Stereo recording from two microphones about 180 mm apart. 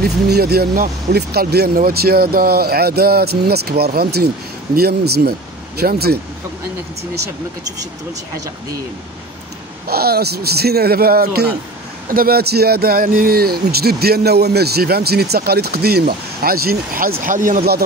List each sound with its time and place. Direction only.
0.0 s a man's voice: 60° right (ahead or behind)
9.8 s a man's voice: 60° right (ahead or behind)